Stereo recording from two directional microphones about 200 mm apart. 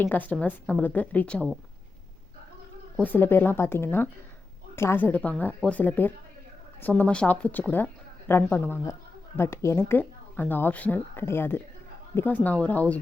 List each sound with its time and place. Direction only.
0.0 s speech: 10° left (ahead or behind)
2.9 s speech: 10° left (ahead or behind)